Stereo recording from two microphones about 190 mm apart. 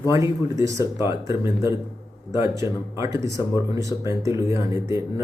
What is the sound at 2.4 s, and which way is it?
A man's voice, 15° right (ahead or behind).